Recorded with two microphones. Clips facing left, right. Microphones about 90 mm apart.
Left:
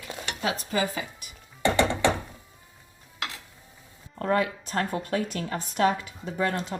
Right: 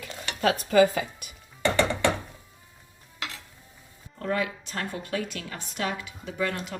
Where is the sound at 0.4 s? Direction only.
45° right (ahead or behind).